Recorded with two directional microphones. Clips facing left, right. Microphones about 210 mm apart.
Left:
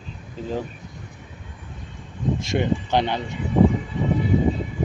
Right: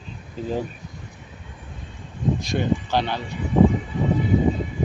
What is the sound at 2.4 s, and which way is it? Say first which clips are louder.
Speech: even; 20° left (ahead or behind).